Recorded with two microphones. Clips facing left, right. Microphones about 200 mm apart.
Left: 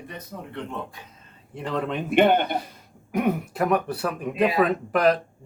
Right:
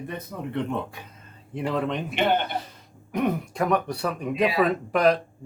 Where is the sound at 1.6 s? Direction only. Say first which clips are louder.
Right 1 dB; 5° right (ahead or behind).